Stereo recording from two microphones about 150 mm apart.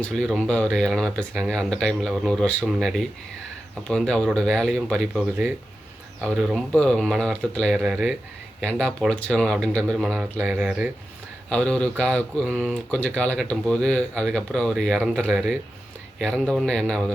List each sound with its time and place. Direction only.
0.0 s speech: 5° left (ahead or behind)
11.4 s speech: 5° left (ahead or behind)